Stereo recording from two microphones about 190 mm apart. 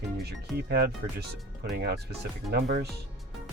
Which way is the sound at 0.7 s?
55° right (ahead or behind).